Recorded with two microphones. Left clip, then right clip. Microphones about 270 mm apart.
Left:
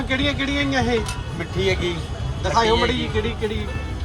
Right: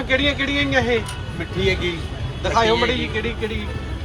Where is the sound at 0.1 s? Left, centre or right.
Left.